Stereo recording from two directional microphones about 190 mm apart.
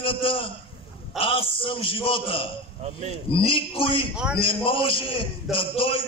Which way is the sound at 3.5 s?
30° left (ahead or behind).